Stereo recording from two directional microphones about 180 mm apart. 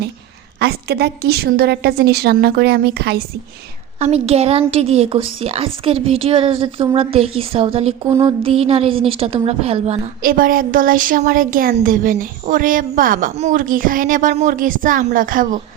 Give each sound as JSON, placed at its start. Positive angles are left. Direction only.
{"t": 0.6, "sound": "a woman's voice", "side_deg": -65}
{"t": 4.0, "sound": "a woman's voice", "side_deg": -35}
{"t": 8.0, "sound": "music", "side_deg": -15}
{"t": 8.4, "sound": "a woman's voice", "side_deg": -30}
{"t": 10.2, "sound": "speech", "side_deg": -50}